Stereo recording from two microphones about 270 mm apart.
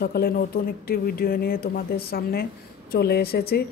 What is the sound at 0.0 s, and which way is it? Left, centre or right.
A woman's voice, left.